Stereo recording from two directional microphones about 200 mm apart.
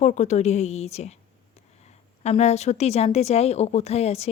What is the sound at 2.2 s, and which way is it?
A woman's voice, 35° left (ahead or behind).